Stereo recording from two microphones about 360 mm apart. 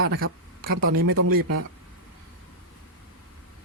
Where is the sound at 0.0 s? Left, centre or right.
Right.